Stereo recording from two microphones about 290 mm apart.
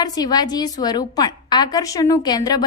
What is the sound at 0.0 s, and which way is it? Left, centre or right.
A woman's voice, centre.